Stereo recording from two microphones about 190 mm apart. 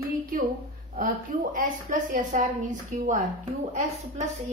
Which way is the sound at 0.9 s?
45° right (ahead or behind).